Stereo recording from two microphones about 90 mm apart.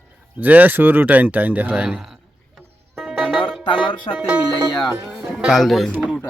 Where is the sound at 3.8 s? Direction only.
65° left (ahead or behind).